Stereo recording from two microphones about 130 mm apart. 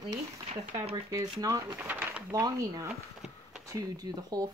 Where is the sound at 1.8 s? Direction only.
15° right (ahead or behind).